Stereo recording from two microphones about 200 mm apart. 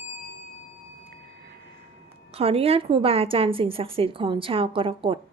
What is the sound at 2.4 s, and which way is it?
A woman's voice, 30° right (ahead or behind).